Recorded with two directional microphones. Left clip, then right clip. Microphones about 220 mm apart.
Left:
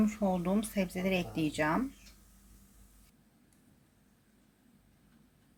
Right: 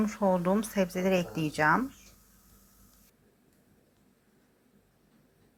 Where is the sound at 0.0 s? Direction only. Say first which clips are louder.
Right 5 dB; 10° right (ahead or behind).